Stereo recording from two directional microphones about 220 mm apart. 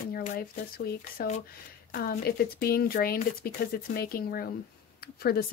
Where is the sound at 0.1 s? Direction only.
40° left (ahead or behind).